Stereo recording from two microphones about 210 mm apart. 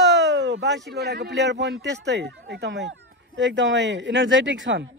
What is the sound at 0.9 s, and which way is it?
Speech, 50° right (ahead or behind).